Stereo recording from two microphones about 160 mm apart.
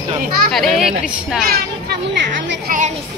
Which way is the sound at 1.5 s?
90° right.